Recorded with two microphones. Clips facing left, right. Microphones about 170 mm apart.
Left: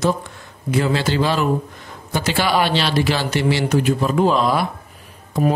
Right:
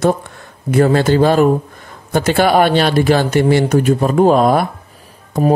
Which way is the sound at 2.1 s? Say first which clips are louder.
Right 7 dB; 50° right (ahead or behind).